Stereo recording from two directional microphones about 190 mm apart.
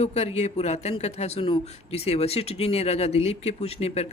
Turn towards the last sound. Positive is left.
turn(degrees=35)  # may be behind; listen again after turning